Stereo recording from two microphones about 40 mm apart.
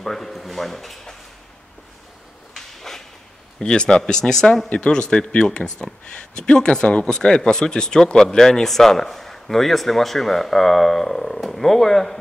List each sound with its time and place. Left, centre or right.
0.0 s speech: centre
2.5 s a sound: centre
3.5 s speech: centre
4.6 s speech: left; by 12.2 s centre